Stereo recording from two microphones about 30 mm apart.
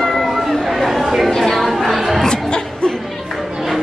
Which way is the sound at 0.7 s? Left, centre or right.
Centre.